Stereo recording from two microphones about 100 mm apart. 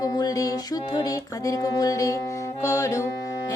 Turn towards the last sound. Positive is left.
turn(degrees=30)  # may be behind; listen again after turning